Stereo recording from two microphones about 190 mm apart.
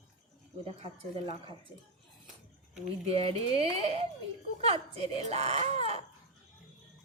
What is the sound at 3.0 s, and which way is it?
Speech, 30° right (ahead or behind).